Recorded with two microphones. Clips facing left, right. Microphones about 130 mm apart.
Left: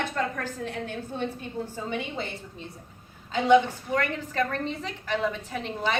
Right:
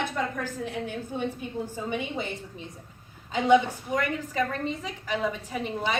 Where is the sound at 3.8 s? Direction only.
5° right (ahead or behind).